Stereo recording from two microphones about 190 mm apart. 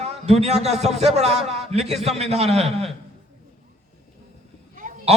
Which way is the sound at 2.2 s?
35° right (ahead or behind).